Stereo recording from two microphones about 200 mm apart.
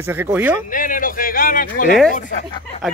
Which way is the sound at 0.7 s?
40° left (ahead or behind).